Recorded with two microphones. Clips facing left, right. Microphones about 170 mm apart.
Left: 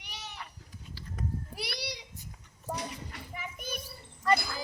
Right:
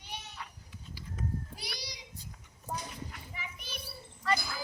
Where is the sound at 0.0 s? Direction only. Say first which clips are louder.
Even; 85° left.